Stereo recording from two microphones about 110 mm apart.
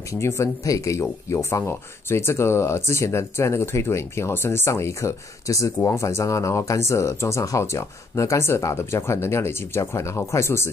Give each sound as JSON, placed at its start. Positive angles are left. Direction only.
{"t": 0.1, "sound": "speech", "side_deg": 25}